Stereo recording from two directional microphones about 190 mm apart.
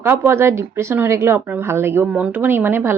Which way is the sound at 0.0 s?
10° right (ahead or behind).